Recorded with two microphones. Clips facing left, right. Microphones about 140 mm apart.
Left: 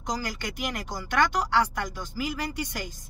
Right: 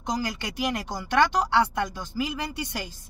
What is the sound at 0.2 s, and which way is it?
A woman's voice, 25° right (ahead or behind).